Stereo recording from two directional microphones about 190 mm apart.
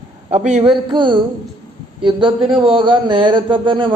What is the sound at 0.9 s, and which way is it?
Speech, 25° right (ahead or behind).